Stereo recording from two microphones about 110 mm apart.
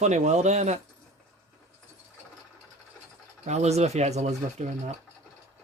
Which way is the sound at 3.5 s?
90° right.